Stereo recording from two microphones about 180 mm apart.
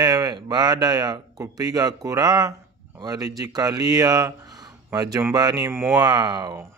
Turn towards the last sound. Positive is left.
turn(degrees=-20)  # may be behind; listen again after turning